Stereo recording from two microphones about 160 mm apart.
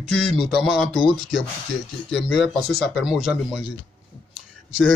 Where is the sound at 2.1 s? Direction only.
Centre (ahead or behind).